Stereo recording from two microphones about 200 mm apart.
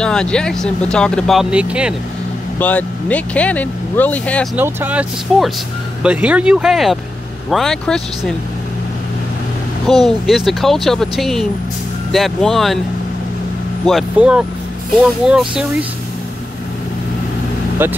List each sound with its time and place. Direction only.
0.0 s speech: 5° left (ahead or behind)
2.6 s speech: 5° left (ahead or behind)
4.6 s speech: 10° right (ahead or behind)
10.0 s speech: centre (ahead or behind)
13.8 s speech: 5° right (ahead or behind)
17.8 s speech: 10° right (ahead or behind)